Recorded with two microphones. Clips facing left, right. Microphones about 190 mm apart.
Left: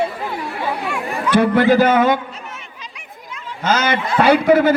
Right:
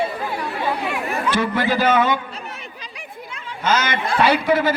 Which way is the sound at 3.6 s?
55° left (ahead or behind).